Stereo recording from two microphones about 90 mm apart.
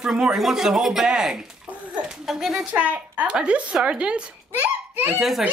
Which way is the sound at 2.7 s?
15° right (ahead or behind).